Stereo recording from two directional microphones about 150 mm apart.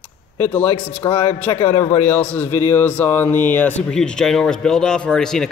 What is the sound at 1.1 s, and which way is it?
Speech, 40° left (ahead or behind).